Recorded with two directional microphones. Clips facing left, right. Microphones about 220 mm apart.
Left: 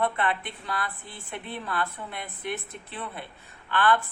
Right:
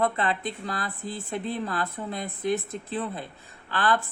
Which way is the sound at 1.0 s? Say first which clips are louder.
Right 11 dB; 90° right.